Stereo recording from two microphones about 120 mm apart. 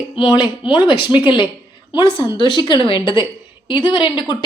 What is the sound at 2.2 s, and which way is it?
A woman's voice, 40° left (ahead or behind).